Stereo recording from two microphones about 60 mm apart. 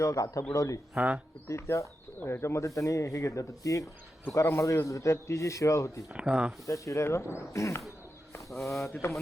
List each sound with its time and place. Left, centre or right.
0.0 s a man's voice: left
0.9 s speech: right
1.5 s a man's voice: left
6.1 s speech: centre
6.7 s a man's voice: left
8.4 s speech: centre
8.9 s mantra: left